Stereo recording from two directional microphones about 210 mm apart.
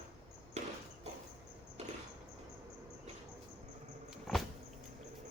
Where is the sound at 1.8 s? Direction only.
30° right (ahead or behind).